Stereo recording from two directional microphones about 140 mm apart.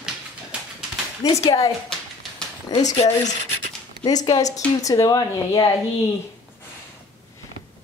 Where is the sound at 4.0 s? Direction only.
30° left (ahead or behind).